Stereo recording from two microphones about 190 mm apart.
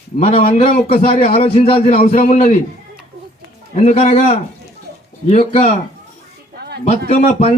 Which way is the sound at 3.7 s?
35° left (ahead or behind).